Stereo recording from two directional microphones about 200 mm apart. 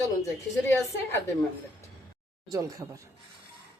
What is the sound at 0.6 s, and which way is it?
Speech, 15° left (ahead or behind).